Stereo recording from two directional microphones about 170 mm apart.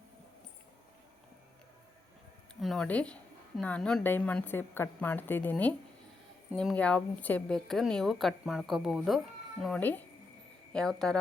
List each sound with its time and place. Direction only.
2.6 s a woman's voice: centre (ahead or behind)